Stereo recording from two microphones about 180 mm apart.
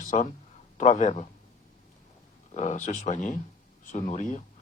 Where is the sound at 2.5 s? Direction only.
40° left (ahead or behind).